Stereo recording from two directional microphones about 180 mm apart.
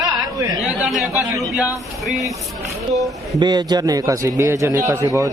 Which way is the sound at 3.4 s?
25° right (ahead or behind).